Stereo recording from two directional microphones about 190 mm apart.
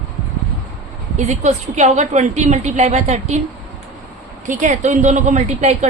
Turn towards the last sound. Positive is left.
turn(degrees=-35)  # may be behind; listen again after turning